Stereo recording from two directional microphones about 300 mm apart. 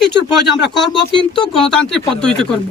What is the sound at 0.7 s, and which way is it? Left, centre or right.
Speech, centre.